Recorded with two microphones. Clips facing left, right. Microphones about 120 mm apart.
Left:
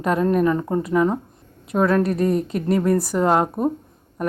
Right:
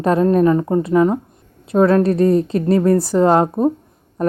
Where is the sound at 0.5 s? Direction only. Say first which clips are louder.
Right 5 dB; 15° right (ahead or behind).